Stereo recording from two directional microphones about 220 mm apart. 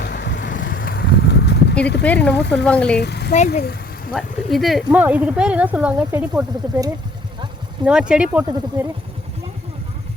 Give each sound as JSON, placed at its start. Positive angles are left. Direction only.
{"t": 0.0, "sound": "vehicle", "side_deg": 50}
{"t": 0.5, "sound": "a sound", "side_deg": 40}
{"t": 2.5, "sound": "speech", "side_deg": 5}
{"t": 3.0, "sound": "speech", "side_deg": 50}
{"t": 4.1, "sound": "speech", "side_deg": 0}